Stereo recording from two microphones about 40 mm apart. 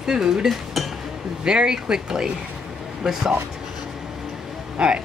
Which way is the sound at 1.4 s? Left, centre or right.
Right.